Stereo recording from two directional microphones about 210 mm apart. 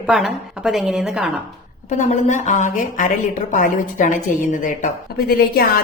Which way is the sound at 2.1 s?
35° left (ahead or behind).